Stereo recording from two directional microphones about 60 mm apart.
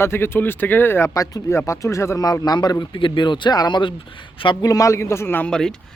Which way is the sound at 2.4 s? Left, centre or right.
Left.